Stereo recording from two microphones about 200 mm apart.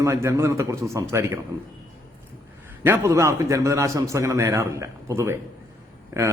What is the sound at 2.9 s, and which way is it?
A man's voice, 15° right (ahead or behind).